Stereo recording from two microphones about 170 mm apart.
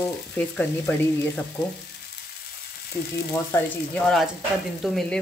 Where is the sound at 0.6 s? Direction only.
5° left (ahead or behind).